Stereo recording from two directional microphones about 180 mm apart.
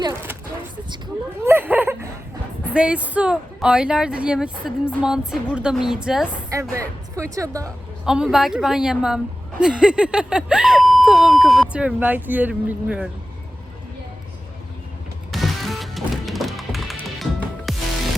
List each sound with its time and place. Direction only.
0.0 s speech: 20° right (ahead or behind)
1.4 s a sound: 10° right (ahead or behind)
2.7 s a woman's voice: 5° right (ahead or behind)
6.5 s speech: 15° right (ahead or behind)
8.0 s a woman's voice: 5° right (ahead or behind)
15.3 s music: centre (ahead or behind)